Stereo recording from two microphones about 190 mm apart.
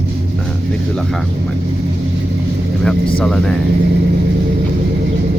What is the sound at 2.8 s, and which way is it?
Speech, 5° left (ahead or behind).